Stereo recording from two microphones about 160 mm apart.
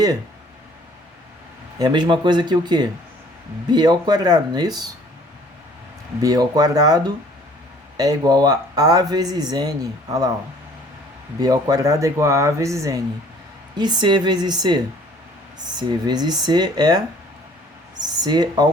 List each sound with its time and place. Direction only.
1.8 s speech: 30° right (ahead or behind)
6.2 s speech: 25° right (ahead or behind)
11.3 s speech: 20° right (ahead or behind)
18.0 s speech: 25° right (ahead or behind)